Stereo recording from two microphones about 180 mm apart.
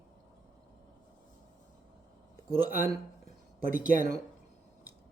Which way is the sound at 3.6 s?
50° right (ahead or behind).